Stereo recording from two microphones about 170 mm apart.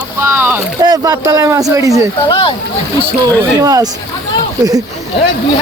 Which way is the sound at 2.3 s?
30° left (ahead or behind).